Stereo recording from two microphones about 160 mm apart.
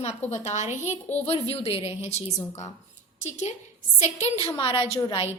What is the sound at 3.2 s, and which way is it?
A woman's voice, 45° left (ahead or behind).